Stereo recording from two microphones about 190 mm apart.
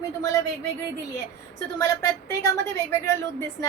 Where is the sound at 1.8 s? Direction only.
15° left (ahead or behind).